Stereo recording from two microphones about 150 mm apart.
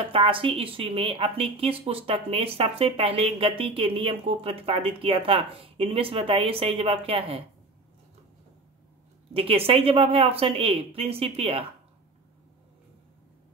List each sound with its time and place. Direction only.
0.0 s a woman's voice: 35° right (ahead or behind)
9.3 s a woman's voice: 40° right (ahead or behind)